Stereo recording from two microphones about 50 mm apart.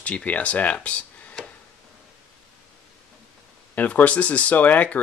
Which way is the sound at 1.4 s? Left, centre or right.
Centre.